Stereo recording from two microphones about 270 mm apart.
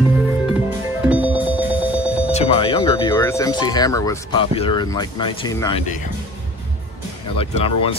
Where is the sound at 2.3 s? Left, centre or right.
Left.